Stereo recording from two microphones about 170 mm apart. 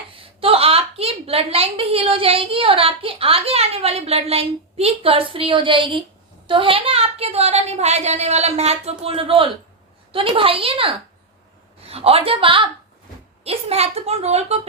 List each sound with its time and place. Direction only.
0.3 s a woman's voice: 35° right (ahead or behind)